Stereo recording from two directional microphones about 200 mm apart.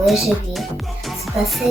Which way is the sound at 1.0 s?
Centre (ahead or behind).